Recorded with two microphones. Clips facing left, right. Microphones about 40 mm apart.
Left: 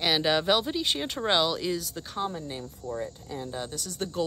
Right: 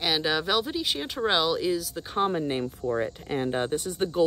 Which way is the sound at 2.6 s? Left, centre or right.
Right.